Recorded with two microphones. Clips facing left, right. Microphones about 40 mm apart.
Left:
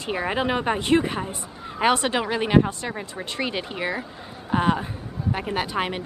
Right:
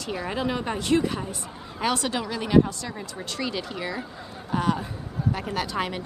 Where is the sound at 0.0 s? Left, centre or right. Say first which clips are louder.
Left 4 dB; left.